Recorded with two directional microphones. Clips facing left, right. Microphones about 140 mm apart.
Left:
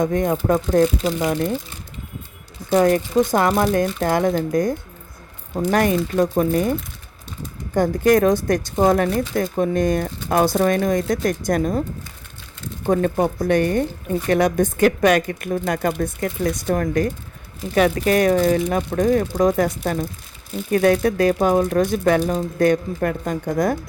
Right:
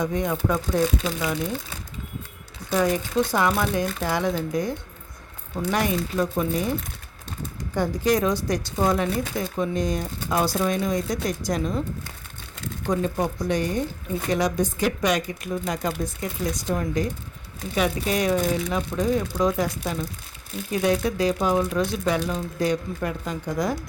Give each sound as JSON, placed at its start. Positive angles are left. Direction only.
{"t": 0.0, "sound": "speech", "side_deg": 50}
{"t": 2.7, "sound": "speech", "side_deg": 55}
{"t": 5.7, "sound": "speech", "side_deg": 55}
{"t": 6.0, "sound": "speech", "side_deg": 35}
{"t": 6.5, "sound": "speech", "side_deg": 50}
{"t": 12.9, "sound": "speech", "side_deg": 55}